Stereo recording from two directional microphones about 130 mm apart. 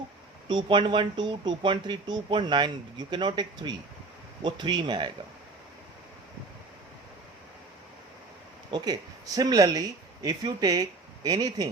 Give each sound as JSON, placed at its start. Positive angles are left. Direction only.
{"t": 0.4, "sound": "speech", "side_deg": -35}
{"t": 8.7, "sound": "speech", "side_deg": -30}